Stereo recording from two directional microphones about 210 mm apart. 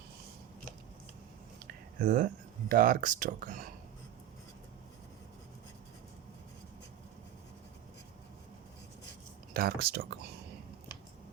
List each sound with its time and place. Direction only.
1.6 s speech: 40° right (ahead or behind)
9.5 s speech: 45° right (ahead or behind)